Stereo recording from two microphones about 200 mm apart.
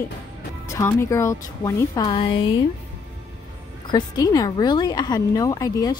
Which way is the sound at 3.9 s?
20° left (ahead or behind).